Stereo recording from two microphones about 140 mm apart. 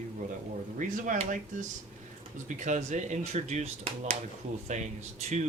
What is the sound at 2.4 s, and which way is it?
Speech, 60° right (ahead or behind).